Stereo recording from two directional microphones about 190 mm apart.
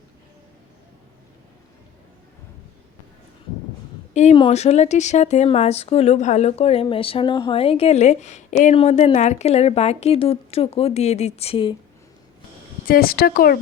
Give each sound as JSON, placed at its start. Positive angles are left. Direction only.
{"t": 4.1, "sound": "a woman's voice", "side_deg": 40}
{"t": 12.8, "sound": "speech", "side_deg": 50}